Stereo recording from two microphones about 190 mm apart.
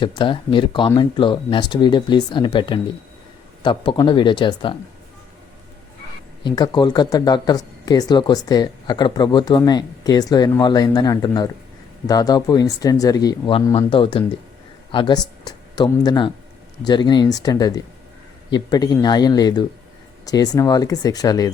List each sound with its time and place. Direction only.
0.2 s speech: 25° left (ahead or behind)
6.4 s speech: 20° left (ahead or behind)